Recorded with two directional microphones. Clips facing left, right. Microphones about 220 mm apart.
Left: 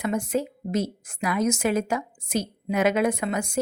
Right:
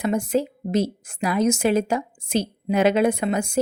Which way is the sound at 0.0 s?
30° right (ahead or behind).